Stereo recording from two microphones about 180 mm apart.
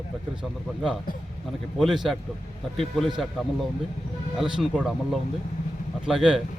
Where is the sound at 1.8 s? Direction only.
Centre (ahead or behind).